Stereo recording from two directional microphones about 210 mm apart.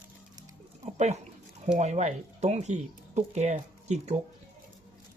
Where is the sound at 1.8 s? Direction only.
30° right (ahead or behind).